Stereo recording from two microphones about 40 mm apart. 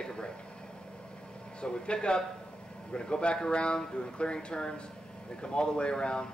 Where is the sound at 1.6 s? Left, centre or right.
Left.